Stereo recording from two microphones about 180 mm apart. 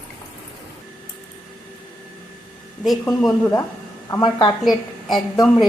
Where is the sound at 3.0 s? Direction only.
20° left (ahead or behind).